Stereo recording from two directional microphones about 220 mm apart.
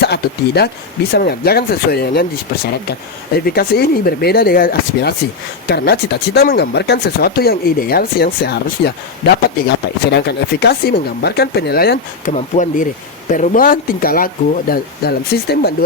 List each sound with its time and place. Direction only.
0.0 s speech: 45° left (ahead or behind)
3.4 s speech: 45° left (ahead or behind)
12.3 s speech: 35° left (ahead or behind)